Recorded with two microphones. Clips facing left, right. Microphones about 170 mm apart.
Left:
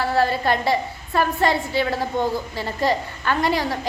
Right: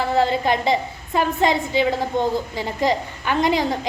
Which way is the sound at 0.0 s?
20° right (ahead or behind).